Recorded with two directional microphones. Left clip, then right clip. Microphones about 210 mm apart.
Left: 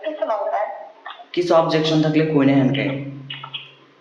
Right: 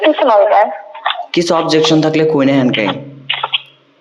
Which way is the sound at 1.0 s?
50° right (ahead or behind).